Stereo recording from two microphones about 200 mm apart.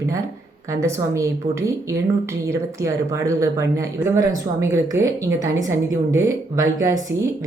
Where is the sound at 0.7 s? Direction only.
15° right (ahead or behind).